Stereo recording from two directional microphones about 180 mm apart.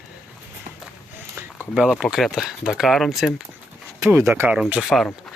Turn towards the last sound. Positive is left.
turn(degrees=0)  # may be behind; listen again after turning